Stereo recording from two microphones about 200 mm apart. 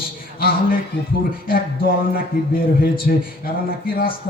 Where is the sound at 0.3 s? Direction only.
50° left (ahead or behind).